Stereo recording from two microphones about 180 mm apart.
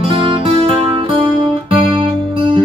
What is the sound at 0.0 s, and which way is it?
Music, 30° right (ahead or behind).